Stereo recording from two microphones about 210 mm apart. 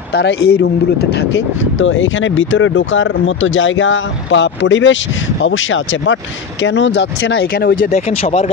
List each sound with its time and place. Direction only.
0.1 s speech: 55° left (ahead or behind)
1.1 s speech: 60° left (ahead or behind); by 8.0 s 40° left (ahead or behind)
8.1 s speech: 30° left (ahead or behind)